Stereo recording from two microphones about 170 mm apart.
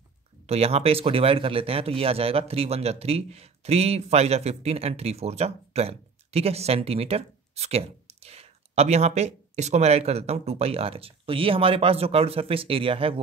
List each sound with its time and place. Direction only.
0.5 s speech: 40° right (ahead or behind)